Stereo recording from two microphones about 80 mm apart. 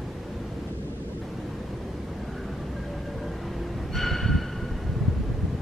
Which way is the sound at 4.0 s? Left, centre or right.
Centre.